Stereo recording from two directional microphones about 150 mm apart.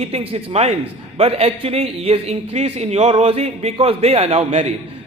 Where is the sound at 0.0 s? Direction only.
45° right (ahead or behind).